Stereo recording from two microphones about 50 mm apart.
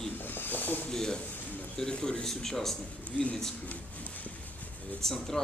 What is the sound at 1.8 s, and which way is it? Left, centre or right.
Speech, centre.